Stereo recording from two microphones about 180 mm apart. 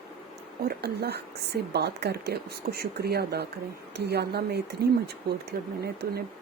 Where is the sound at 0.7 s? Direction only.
60° right (ahead or behind).